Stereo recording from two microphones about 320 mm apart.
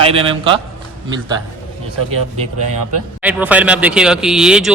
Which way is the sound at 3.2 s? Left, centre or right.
Centre.